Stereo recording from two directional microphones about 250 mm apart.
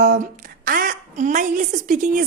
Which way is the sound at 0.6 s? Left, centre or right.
Right.